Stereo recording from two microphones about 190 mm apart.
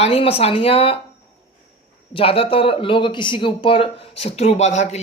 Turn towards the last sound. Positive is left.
turn(degrees=35)  # may be behind; listen again after turning